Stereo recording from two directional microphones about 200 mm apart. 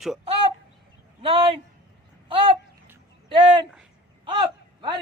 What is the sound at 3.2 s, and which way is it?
Speech, 25° right (ahead or behind).